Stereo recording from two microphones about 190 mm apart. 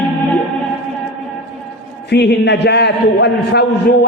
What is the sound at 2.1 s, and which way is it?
A man's voice, 60° left (ahead or behind).